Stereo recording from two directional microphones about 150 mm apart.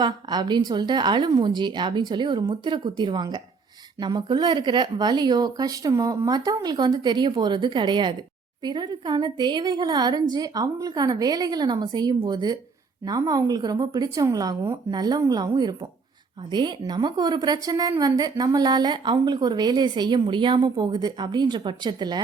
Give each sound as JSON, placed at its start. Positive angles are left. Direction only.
{"t": 0.0, "sound": "a woman's voice", "side_deg": -30}